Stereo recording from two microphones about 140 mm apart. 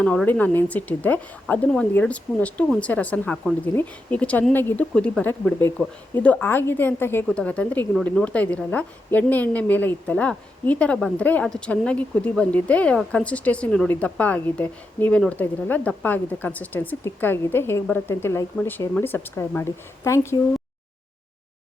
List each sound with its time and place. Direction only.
0.0 s a woman's voice: 5° left (ahead or behind)